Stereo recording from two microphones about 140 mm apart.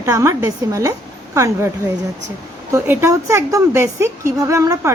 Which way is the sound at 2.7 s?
15° right (ahead or behind).